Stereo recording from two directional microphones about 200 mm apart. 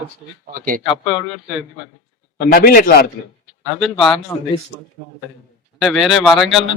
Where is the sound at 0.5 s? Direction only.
45° right (ahead or behind).